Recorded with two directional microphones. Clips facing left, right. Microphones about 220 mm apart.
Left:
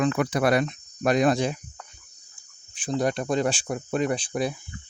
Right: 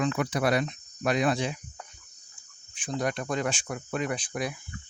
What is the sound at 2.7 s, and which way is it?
Speech, 35° left (ahead or behind).